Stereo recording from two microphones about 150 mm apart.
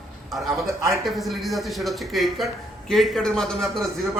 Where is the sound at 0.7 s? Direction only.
20° right (ahead or behind).